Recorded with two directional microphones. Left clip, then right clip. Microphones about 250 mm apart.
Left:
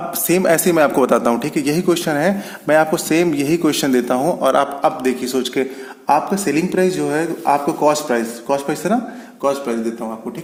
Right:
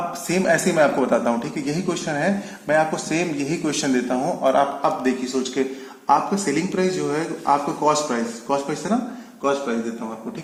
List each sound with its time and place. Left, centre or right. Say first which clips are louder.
0.3 s speech: left 5 dB; left